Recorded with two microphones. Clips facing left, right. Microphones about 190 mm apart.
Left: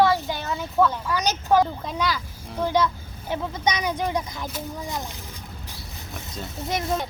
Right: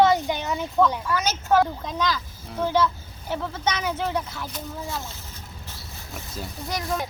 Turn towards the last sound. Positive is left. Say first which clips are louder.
# left 3 dB
turn(degrees=20)  # may be behind; listen again after turning